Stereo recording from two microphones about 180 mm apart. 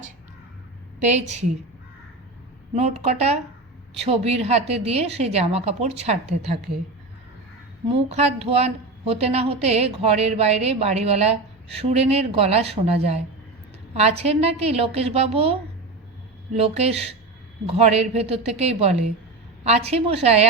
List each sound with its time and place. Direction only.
1.0 s a woman's voice: 40° right (ahead or behind)
2.7 s a woman's voice: 35° right (ahead or behind)
7.9 s a woman's voice: 35° right (ahead or behind)
16.6 s a woman's voice: 35° right (ahead or behind)